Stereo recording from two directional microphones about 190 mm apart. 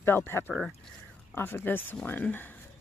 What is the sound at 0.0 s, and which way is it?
Speech, 10° left (ahead or behind).